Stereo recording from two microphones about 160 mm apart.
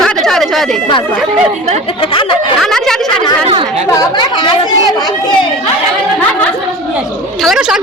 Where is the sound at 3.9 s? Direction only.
25° left (ahead or behind).